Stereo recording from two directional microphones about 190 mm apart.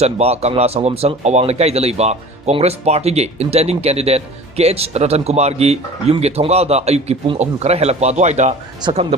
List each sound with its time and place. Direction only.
0.0 s speech: 35° right (ahead or behind)